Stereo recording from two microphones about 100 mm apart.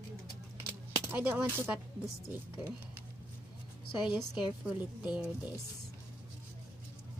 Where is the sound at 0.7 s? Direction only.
20° right (ahead or behind).